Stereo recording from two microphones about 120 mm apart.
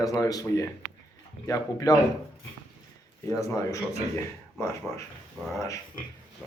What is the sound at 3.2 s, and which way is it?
Speech, 25° left (ahead or behind).